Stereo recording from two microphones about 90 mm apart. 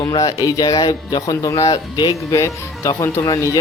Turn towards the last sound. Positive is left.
turn(degrees=35)  # may be behind; listen again after turning